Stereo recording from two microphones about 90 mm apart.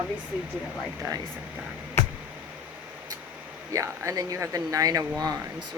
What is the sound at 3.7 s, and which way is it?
Speech, 35° right (ahead or behind).